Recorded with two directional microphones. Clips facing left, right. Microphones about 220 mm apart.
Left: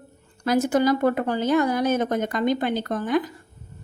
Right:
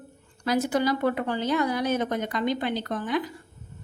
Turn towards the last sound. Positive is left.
turn(degrees=45)  # may be behind; listen again after turning